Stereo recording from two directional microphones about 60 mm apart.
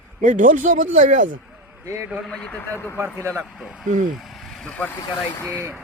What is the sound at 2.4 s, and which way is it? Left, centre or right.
Speech, left.